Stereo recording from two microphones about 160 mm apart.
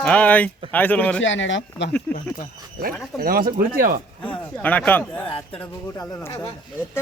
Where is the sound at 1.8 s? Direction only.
90° left.